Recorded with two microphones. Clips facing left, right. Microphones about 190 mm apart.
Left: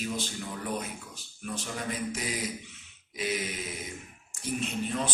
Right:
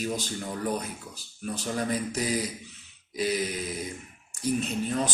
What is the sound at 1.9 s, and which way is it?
Speech, 35° right (ahead or behind).